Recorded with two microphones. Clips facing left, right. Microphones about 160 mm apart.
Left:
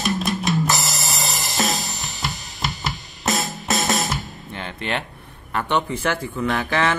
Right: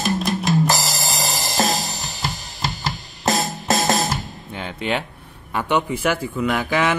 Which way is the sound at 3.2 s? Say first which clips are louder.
Right 3 dB; 30° right (ahead or behind).